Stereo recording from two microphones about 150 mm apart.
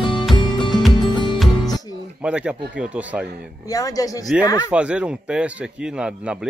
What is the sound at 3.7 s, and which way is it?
Speech, 25° left (ahead or behind).